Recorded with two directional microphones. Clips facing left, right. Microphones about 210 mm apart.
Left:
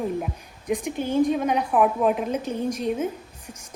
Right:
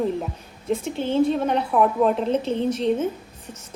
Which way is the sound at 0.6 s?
15° left (ahead or behind).